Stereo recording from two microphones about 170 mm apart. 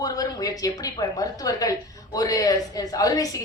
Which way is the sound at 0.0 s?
20° left (ahead or behind).